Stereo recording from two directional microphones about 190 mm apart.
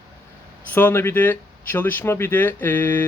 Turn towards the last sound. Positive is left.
turn(degrees=10)  # may be behind; listen again after turning